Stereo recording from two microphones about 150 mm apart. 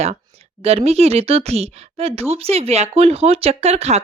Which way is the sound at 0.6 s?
45° right (ahead or behind).